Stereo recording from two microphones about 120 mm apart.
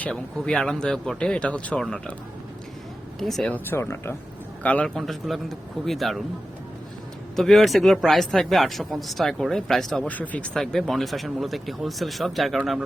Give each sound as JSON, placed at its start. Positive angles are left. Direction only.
{"t": 0.0, "sound": "speech", "side_deg": 5}
{"t": 3.2, "sound": "speech", "side_deg": 0}
{"t": 3.5, "sound": "speech", "side_deg": 20}
{"t": 4.6, "sound": "speech", "side_deg": 10}
{"t": 7.3, "sound": "speech", "side_deg": 0}
{"t": 10.1, "sound": "speech", "side_deg": 15}